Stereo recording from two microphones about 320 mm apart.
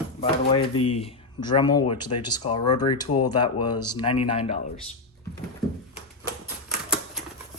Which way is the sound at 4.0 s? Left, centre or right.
Centre.